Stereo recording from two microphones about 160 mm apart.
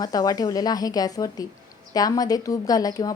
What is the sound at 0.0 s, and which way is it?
A woman's voice, 25° left (ahead or behind).